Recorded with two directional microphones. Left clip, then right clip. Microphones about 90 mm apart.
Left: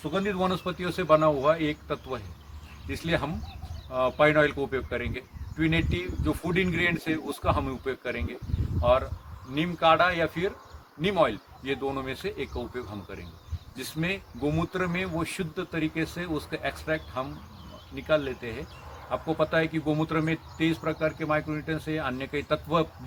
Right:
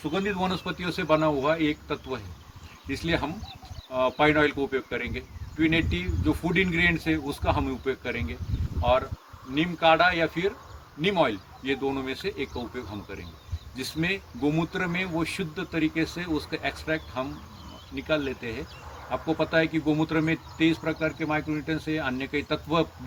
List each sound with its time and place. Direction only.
0.0 s speech: 25° left (ahead or behind)